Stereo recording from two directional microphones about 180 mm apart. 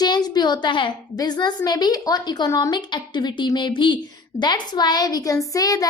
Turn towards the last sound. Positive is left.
turn(degrees=20)  # may be behind; listen again after turning